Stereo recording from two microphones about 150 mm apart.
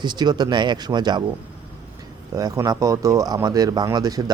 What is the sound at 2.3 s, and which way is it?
Speech, 20° right (ahead or behind).